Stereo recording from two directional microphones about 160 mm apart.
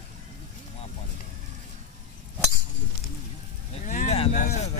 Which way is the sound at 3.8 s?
55° left (ahead or behind).